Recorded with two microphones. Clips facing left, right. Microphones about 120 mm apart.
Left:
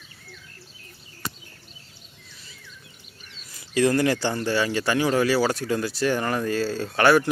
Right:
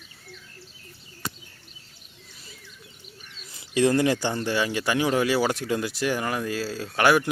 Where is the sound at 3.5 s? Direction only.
20° right (ahead or behind).